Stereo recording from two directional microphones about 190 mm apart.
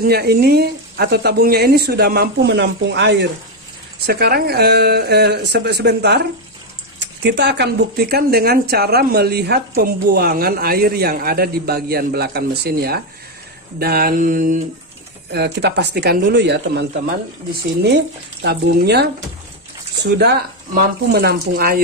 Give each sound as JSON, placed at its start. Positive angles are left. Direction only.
{"t": 0.0, "sound": "speech", "side_deg": -55}
{"t": 4.0, "sound": "speech", "side_deg": -55}
{"t": 13.7, "sound": "a sound", "side_deg": -55}
{"t": 15.3, "sound": "speech", "side_deg": -60}
{"t": 17.8, "sound": "speech", "side_deg": -60}